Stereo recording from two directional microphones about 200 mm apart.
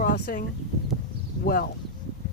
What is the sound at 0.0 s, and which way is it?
Speech, 45° left (ahead or behind).